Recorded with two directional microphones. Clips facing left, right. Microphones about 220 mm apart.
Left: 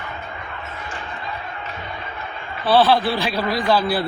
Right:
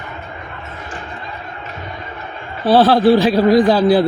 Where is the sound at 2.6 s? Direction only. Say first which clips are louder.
Right 6 dB; 40° right (ahead or behind).